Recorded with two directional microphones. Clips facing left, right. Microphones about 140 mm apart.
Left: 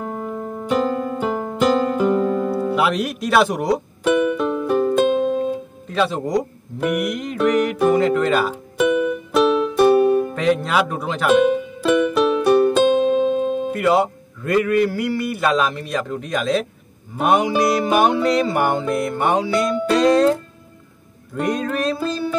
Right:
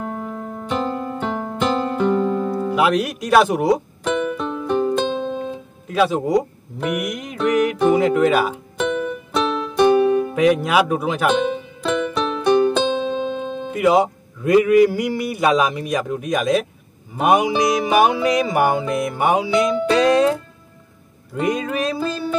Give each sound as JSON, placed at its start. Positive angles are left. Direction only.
{"t": 0.0, "sound": "music", "side_deg": 5}
{"t": 8.7, "sound": "music", "side_deg": 5}
{"t": 9.9, "sound": "music", "side_deg": 35}
{"t": 10.3, "sound": "music", "side_deg": -10}
{"t": 11.2, "sound": "music", "side_deg": 5}
{"t": 13.7, "sound": "music", "side_deg": -15}
{"t": 21.4, "sound": "music", "side_deg": -5}